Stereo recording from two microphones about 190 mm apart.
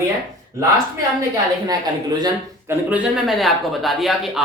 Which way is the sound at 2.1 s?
20° right (ahead or behind).